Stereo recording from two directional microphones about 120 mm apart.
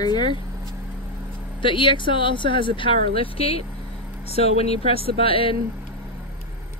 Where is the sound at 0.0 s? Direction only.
35° left (ahead or behind).